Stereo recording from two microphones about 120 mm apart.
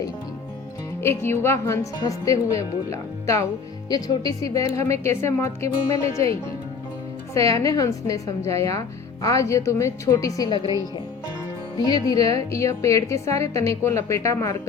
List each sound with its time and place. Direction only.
1.0 s a woman's voice: 20° left (ahead or behind)
7.3 s a woman's voice: 25° left (ahead or behind)
11.9 s a woman's voice: 30° left (ahead or behind)